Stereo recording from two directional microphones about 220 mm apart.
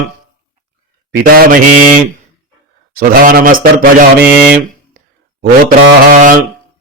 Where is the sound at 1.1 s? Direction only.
40° right (ahead or behind).